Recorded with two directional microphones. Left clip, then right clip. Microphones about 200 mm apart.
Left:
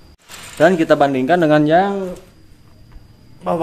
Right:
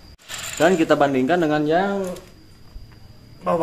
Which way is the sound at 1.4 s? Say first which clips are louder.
Left 6 dB; 55° left (ahead or behind).